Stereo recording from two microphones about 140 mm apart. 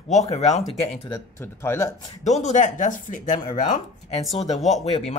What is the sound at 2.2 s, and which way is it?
Speech, 55° left (ahead or behind).